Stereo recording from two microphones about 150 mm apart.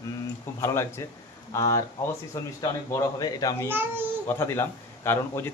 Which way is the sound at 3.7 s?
15° right (ahead or behind).